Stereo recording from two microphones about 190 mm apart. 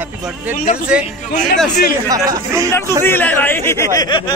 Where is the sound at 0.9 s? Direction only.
5° right (ahead or behind).